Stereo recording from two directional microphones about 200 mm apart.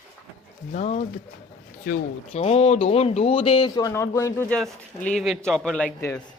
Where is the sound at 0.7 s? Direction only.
35° left (ahead or behind).